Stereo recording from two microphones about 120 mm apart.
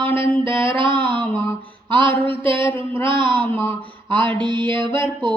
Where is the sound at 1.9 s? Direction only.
45° right (ahead or behind).